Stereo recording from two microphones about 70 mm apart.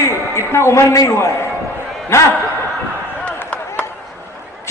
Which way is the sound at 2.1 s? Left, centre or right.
Left.